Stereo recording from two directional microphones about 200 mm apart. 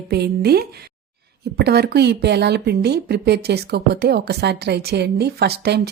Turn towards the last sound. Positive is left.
turn(degrees=-55)  # may be behind; listen again after turning